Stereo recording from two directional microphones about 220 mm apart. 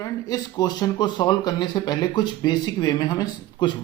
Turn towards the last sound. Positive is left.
turn(degrees=20)  # may be behind; listen again after turning